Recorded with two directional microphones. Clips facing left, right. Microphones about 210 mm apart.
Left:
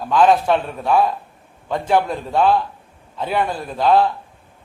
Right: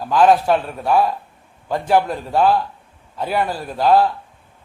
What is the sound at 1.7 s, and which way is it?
A man's voice, 5° right (ahead or behind).